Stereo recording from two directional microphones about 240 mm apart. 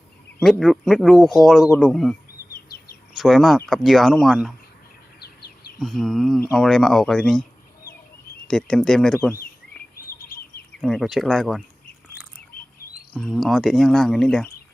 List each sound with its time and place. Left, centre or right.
0.6 s speech: centre
3.2 s speech: centre
5.8 s speech: centre
8.4 s speech: centre
10.2 s bird vocalization: left
10.8 s speech: centre
13.1 s speech: centre